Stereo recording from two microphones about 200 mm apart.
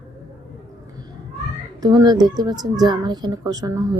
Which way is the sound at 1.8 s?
20° right (ahead or behind).